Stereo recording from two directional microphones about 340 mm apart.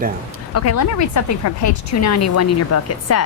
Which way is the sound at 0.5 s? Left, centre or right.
Left.